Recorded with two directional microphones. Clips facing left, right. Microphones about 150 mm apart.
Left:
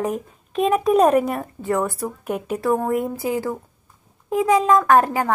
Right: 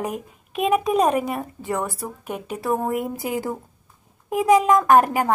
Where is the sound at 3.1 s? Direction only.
20° right (ahead or behind).